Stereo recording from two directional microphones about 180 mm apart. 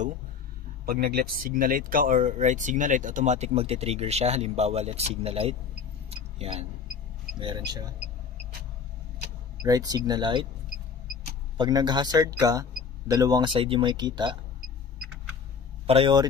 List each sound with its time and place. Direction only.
0.8 s speech: 55° right (ahead or behind); by 5.6 s 35° right (ahead or behind)
6.0 s a sound: 35° right (ahead or behind)
7.3 s speech: 25° right (ahead or behind)
9.6 s speech: 20° right (ahead or behind)
11.5 s speech: 25° right (ahead or behind)
15.9 s speech: 30° right (ahead or behind)